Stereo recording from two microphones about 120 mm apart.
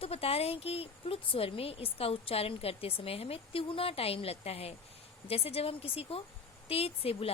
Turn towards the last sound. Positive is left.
turn(degrees=55)  # may be behind; listen again after turning